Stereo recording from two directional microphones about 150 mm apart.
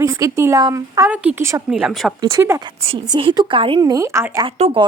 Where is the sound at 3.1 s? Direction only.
30° right (ahead or behind).